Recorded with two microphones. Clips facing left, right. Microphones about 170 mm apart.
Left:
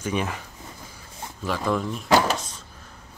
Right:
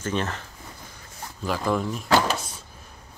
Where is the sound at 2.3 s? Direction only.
10° right (ahead or behind).